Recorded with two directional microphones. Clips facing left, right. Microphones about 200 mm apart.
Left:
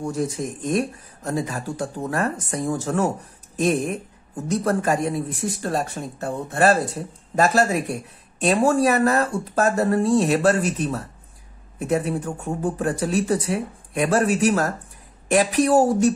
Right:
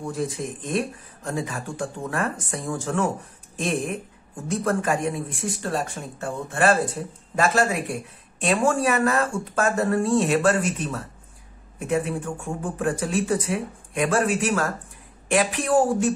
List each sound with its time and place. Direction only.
0.7 s speech: 40° left (ahead or behind)